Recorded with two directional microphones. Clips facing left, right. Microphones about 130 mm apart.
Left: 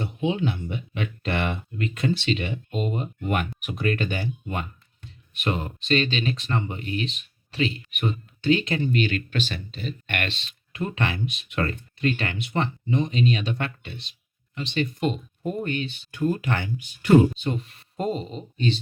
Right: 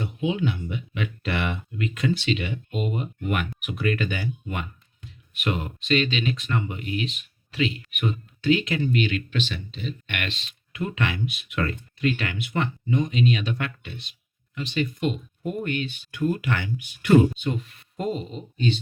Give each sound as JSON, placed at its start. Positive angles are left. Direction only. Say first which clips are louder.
{"t": 0.0, "sound": "speech", "louder": "even", "side_deg": 35}